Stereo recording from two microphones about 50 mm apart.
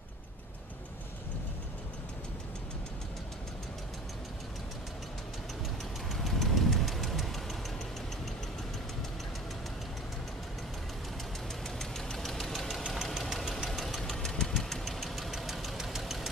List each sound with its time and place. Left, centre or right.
6.0 s vehicle: centre
11.8 s engine knocking: centre
13.7 s engine knocking: centre